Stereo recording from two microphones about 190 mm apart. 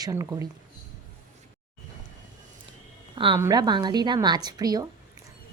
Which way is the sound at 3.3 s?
20° right (ahead or behind).